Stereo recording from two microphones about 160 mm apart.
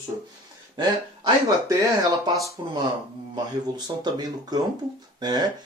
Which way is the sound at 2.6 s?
30° right (ahead or behind).